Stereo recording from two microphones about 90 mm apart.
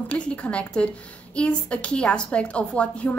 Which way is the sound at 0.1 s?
15° left (ahead or behind).